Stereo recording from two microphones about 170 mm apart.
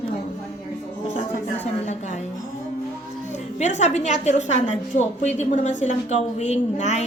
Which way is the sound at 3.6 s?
45° left (ahead or behind).